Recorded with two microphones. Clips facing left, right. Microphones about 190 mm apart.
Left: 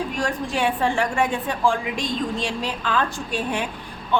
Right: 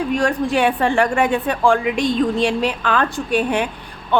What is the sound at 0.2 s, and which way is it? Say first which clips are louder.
Speech: right 5 dB; 65° right (ahead or behind).